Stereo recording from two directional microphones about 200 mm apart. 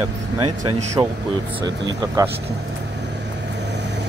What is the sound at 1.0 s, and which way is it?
A man's voice, 15° right (ahead or behind).